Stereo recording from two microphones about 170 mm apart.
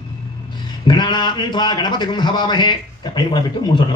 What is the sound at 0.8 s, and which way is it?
A man's voice, 25° left (ahead or behind).